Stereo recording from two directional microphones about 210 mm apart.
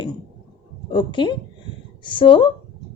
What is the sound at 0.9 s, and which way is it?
Speech, 20° left (ahead or behind).